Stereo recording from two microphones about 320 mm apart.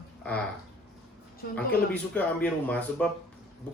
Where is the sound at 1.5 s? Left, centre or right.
Centre.